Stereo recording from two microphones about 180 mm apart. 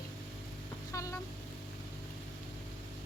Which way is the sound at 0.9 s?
15° left (ahead or behind).